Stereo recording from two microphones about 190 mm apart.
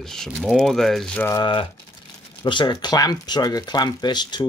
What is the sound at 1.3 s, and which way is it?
Speech, 25° left (ahead or behind).